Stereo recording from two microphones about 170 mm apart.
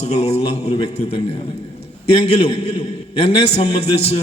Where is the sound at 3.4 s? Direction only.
40° left (ahead or behind).